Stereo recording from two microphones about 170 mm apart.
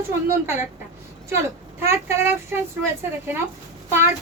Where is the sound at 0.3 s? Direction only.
15° right (ahead or behind).